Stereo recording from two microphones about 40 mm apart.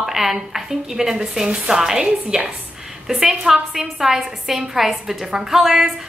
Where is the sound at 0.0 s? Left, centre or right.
Centre.